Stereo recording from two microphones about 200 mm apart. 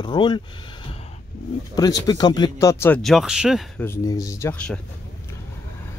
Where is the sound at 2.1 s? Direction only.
20° left (ahead or behind).